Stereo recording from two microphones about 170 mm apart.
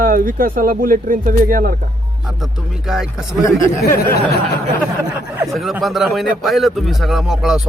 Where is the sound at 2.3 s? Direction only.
5° right (ahead or behind).